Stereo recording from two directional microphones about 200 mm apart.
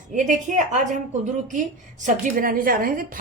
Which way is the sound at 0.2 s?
40° right (ahead or behind).